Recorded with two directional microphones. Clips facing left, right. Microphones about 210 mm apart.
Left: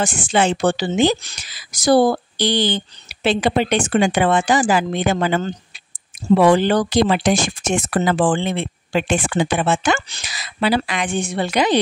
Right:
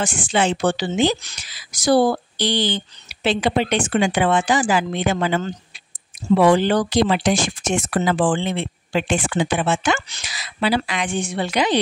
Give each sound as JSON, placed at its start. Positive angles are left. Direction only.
{"t": 0.0, "sound": "speech", "side_deg": 40}